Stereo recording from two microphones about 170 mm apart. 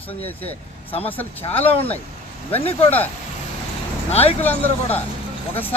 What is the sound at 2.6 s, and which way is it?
Speech, 35° left (ahead or behind).